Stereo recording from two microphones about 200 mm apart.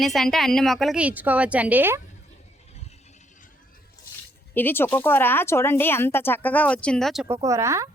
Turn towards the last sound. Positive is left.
turn(degrees=-15)  # may be behind; listen again after turning